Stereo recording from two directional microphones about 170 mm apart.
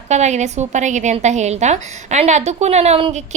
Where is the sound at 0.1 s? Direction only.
45° right (ahead or behind).